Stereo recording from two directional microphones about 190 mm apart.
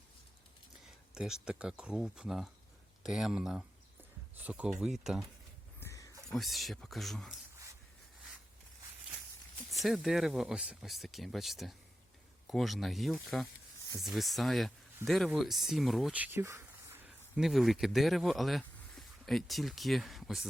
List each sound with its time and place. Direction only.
1.1 s speech: 5° right (ahead or behind)
5.8 s a sound: 15° left (ahead or behind)
6.2 s speech: centre (ahead or behind)
9.7 s speech: centre (ahead or behind)
17.4 s speech: centre (ahead or behind)